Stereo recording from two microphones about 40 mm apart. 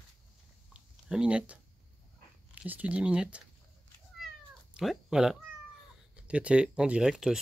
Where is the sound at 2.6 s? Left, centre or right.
Right.